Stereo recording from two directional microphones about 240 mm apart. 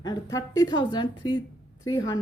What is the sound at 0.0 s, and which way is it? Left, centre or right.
A woman's voice, centre.